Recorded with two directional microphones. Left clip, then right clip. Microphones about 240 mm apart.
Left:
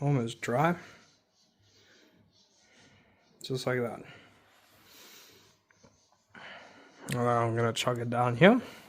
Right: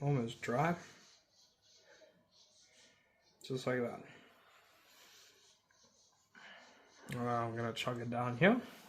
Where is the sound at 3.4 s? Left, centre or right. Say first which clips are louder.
Left 6 dB; left.